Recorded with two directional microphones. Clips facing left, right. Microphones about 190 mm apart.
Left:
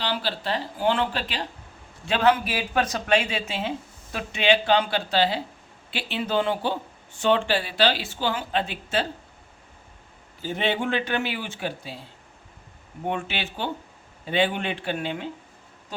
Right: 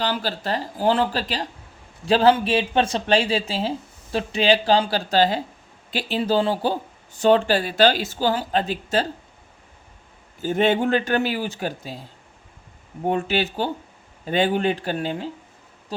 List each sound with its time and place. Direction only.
0.0 s speech: 45° right (ahead or behind)
10.4 s speech: 50° right (ahead or behind)
13.1 s speech: 40° right (ahead or behind)